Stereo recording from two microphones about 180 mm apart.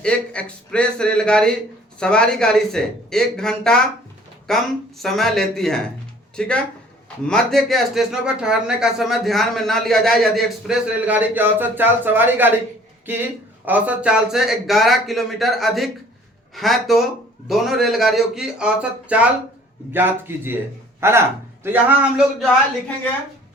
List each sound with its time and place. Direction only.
0.0 s a man's voice: 5° left (ahead or behind); by 21.9 s 10° right (ahead or behind)